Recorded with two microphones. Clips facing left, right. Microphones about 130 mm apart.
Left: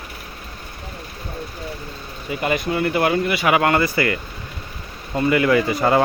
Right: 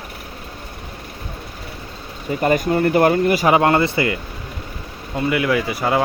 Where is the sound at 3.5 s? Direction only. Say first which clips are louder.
Right 2 dB; 25° right (ahead or behind).